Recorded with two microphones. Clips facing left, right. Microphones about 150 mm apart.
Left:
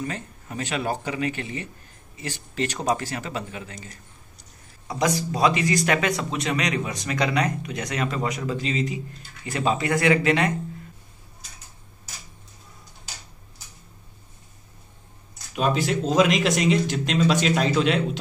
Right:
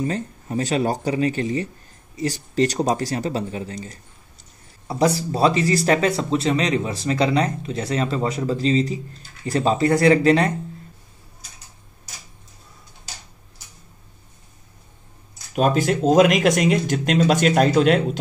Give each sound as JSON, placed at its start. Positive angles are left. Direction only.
{"t": 0.0, "sound": "a man's voice", "side_deg": -35}
{"t": 15.5, "sound": "speech", "side_deg": -50}